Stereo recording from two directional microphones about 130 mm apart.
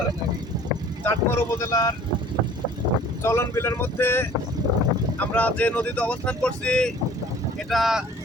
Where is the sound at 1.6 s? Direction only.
30° left (ahead or behind).